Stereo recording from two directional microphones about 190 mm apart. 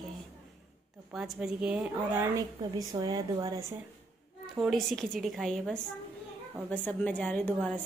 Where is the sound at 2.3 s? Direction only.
20° right (ahead or behind).